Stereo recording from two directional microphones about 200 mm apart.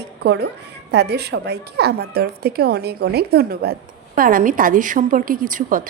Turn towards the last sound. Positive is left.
turn(degrees=-40)  # may be behind; listen again after turning